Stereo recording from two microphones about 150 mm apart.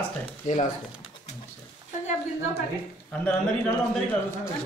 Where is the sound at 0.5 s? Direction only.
60° left (ahead or behind).